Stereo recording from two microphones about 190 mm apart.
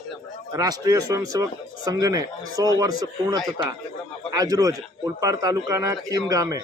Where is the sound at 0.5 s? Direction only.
20° right (ahead or behind).